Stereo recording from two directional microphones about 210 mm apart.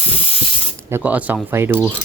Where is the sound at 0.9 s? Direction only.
10° right (ahead or behind).